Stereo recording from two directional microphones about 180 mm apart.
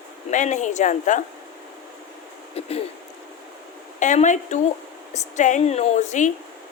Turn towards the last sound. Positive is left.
turn(degrees=45)  # may be behind; listen again after turning